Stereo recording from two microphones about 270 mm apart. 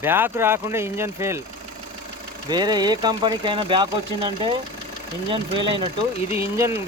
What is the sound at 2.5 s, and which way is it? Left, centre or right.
Speech, centre.